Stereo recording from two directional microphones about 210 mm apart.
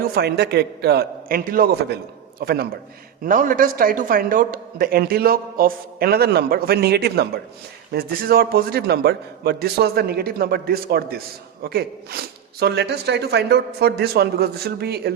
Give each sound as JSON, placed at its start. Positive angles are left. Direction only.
{"t": 0.1, "sound": "a man's voice", "side_deg": -50}